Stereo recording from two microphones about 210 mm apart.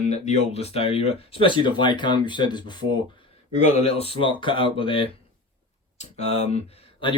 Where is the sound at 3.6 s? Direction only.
30° left (ahead or behind).